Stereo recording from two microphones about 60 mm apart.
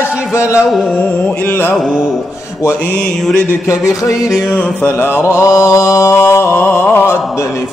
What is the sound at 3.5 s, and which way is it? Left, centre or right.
Music, left.